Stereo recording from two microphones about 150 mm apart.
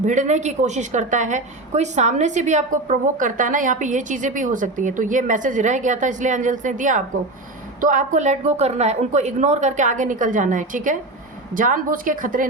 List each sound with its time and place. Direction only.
0.0 s a woman's voice: 55° right (ahead or behind)